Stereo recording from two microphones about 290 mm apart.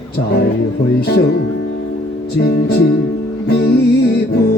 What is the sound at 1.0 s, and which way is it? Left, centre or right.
Music, left.